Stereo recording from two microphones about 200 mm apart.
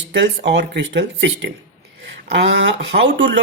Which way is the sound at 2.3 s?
65° right (ahead or behind).